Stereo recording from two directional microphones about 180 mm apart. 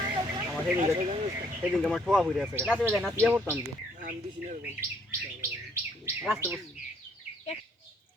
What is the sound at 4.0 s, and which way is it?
Speech, 45° right (ahead or behind).